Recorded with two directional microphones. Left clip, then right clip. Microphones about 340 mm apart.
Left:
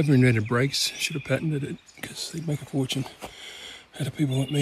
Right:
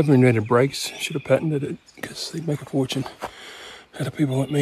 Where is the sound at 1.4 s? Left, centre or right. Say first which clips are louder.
Right 6 dB; right.